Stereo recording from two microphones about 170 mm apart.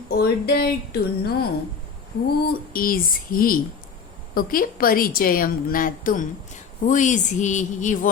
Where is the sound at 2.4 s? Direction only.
60° left (ahead or behind).